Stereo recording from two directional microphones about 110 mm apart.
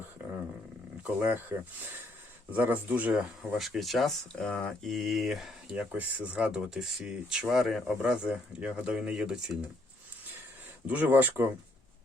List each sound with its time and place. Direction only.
1.0 s speech: 15° right (ahead or behind)
5.7 s speech: 15° right (ahead or behind)
10.8 s speech: 15° right (ahead or behind)